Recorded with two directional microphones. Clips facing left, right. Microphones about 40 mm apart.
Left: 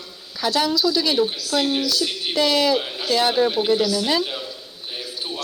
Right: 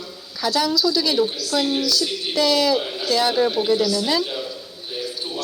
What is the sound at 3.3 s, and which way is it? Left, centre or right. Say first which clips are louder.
Speech: even; centre.